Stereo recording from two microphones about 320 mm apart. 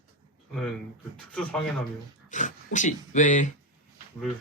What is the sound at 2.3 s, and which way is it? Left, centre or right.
Speech, left.